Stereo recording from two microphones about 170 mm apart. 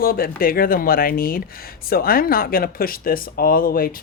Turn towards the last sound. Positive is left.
turn(degrees=60)  # may be behind; listen again after turning